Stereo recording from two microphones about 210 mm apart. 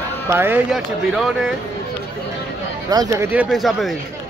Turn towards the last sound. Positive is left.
turn(degrees=0)  # may be behind; listen again after turning